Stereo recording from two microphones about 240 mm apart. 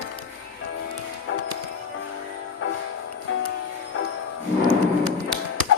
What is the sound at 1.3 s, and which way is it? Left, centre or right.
Music, left.